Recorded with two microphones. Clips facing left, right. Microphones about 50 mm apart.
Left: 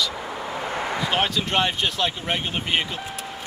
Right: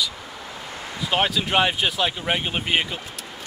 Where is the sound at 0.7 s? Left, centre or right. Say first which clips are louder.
Left 9 dB; left.